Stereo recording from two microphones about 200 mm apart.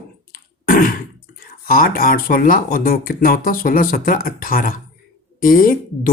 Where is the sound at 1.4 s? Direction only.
45° left (ahead or behind).